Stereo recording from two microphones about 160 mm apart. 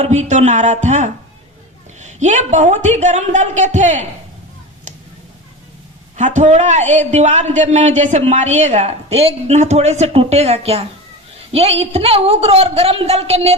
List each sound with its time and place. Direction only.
0.0 s a man's voice: 45° right (ahead or behind)
6.1 s a man's voice: 50° right (ahead or behind)